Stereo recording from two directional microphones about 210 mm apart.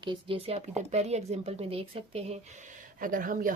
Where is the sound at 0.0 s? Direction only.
25° right (ahead or behind).